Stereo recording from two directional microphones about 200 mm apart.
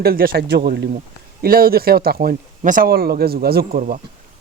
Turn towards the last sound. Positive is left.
turn(degrees=-45)  # may be behind; listen again after turning